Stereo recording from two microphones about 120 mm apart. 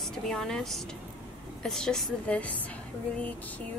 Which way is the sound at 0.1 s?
5° left (ahead or behind).